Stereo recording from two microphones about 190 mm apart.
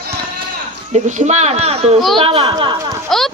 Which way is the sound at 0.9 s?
40° right (ahead or behind).